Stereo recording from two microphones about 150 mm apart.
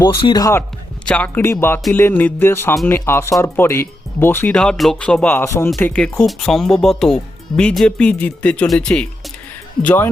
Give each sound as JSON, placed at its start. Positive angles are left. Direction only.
{"t": 0.0, "sound": "speech", "side_deg": 25}
{"t": 1.0, "sound": "speech", "side_deg": 10}